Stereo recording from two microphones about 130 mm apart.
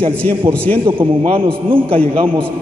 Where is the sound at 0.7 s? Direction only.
45° right (ahead or behind).